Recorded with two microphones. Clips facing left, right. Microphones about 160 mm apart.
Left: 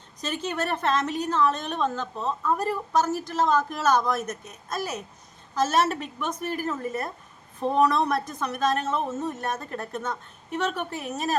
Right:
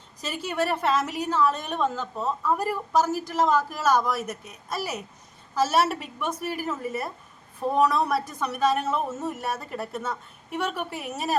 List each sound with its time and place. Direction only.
0.2 s a woman's voice: 10° right (ahead or behind)